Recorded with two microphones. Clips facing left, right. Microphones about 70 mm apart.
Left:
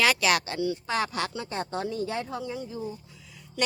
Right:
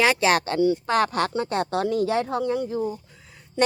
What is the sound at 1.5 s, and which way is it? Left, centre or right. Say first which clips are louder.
Speech: right 7 dB; right.